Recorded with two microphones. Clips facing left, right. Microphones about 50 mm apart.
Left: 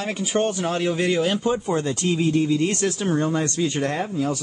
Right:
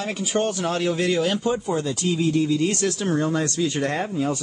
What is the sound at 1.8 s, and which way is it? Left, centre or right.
Speech, left.